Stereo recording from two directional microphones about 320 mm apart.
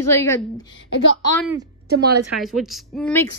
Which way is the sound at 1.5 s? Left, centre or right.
Right.